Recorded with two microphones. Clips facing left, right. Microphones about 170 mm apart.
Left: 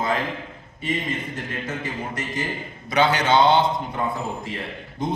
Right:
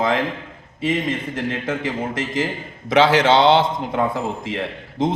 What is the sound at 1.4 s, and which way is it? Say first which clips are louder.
A man's voice: right 6 dB; 90° right.